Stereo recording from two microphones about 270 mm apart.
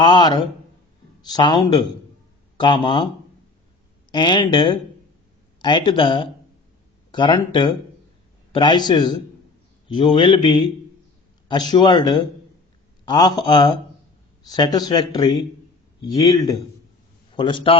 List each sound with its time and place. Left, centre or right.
0.0 s a man's voice: centre
4.1 s a man's voice: centre